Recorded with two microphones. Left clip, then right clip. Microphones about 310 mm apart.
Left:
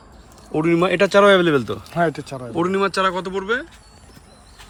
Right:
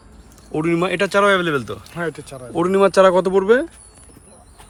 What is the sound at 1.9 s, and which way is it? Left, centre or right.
Speech, left.